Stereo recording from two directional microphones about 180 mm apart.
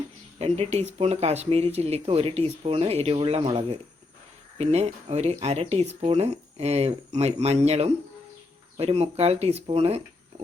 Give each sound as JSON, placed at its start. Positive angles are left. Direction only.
{"t": 0.3, "sound": "speech", "side_deg": -35}